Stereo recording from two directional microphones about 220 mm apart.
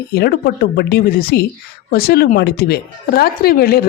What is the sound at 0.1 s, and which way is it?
Speech, 45° left (ahead or behind).